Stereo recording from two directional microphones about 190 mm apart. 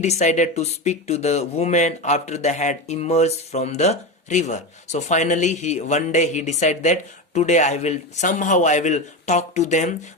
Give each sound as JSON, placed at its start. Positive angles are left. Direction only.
{"t": 0.0, "sound": "speech", "side_deg": 40}